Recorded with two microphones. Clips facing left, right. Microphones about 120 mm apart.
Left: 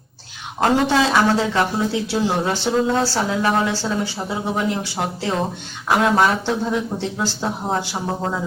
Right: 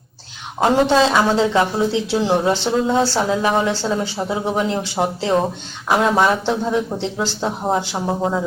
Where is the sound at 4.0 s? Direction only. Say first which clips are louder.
Right 3 dB; 20° right (ahead or behind).